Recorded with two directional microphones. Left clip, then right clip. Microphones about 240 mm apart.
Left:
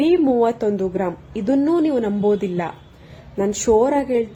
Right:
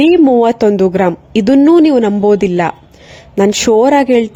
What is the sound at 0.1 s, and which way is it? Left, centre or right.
Speech, right.